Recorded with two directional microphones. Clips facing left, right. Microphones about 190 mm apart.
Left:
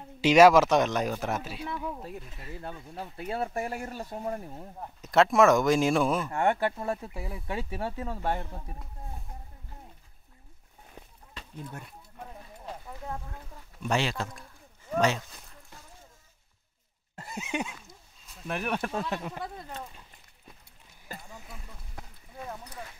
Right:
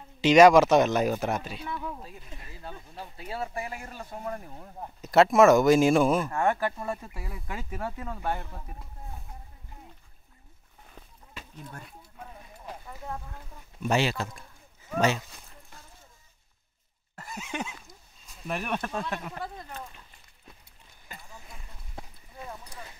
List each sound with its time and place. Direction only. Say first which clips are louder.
0.2 s speech: right 2 dB; 5° left (ahead or behind)
2.0 s speech: left 5 dB; 60° left (ahead or behind); by 4.1 s 45° left (ahead or behind)
4.2 s speech: even; 25° left (ahead or behind)
4.7 s speech: right 3 dB; 5° right (ahead or behind)
6.3 s speech: even; 25° left (ahead or behind)
13.8 s speech: right 3 dB; 5° right (ahead or behind)
17.1 s a sound: right 1 dB; 25° left (ahead or behind)
18.5 s speech: even; 5° left (ahead or behind)
18.9 s a sound: left 1 dB; 20° left (ahead or behind)